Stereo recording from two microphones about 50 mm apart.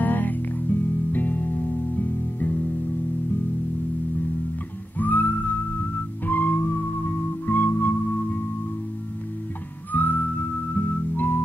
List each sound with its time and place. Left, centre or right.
0.0 s music: left
4.9 s music: left
9.9 s music: left